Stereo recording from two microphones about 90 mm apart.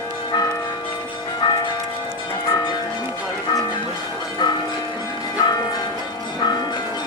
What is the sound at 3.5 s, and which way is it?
Music, 40° left (ahead or behind).